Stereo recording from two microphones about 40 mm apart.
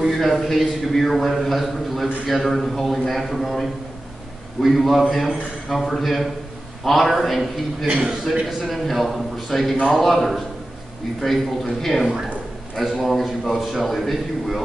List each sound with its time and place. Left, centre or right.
0.1 s a man's voice: centre
7.8 s a man's voice: right
8.5 s a man's voice: centre
13.0 s a man's voice: centre
13.6 s a man's voice: centre
13.8 s a man's voice: centre